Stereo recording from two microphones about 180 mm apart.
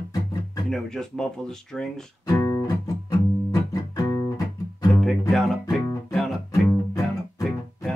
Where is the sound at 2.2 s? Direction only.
20° left (ahead or behind).